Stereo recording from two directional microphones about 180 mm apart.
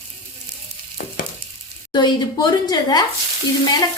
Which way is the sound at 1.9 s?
25° left (ahead or behind).